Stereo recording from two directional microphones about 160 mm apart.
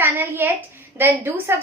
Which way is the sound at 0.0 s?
15° right (ahead or behind).